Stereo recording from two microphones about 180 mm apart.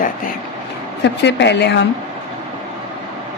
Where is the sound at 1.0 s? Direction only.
75° left (ahead or behind).